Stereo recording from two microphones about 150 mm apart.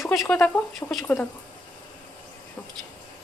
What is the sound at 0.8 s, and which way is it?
Speech, 15° left (ahead or behind).